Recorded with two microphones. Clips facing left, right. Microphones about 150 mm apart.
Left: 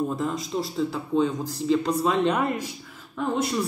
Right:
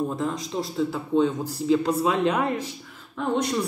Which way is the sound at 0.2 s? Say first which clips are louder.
Even; centre (ahead or behind).